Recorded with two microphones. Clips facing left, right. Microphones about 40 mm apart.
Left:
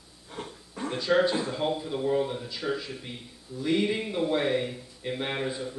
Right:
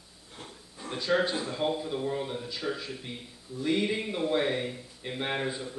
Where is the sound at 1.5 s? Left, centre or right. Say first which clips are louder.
Left 1 dB; centre.